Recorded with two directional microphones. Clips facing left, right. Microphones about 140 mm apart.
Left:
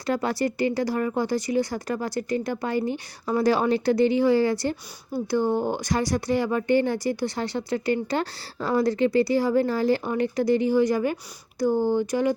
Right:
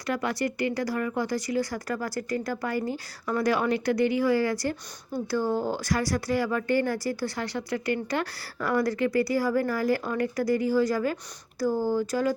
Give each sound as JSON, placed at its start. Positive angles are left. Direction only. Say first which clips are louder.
{"t": 0.0, "sound": "speech", "louder": "left 3 dB", "side_deg": 30}